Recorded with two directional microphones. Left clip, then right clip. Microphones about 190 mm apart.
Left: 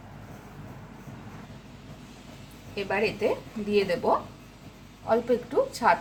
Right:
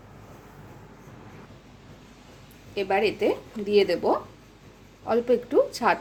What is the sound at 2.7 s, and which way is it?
A woman's voice, 45° right (ahead or behind).